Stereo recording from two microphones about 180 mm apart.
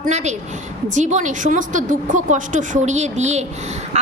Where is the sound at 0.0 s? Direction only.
40° right (ahead or behind).